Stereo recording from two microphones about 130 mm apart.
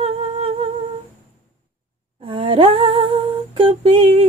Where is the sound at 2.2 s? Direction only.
45° right (ahead or behind).